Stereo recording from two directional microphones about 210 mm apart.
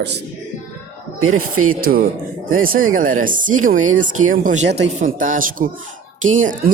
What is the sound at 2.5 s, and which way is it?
Speech, 40° right (ahead or behind).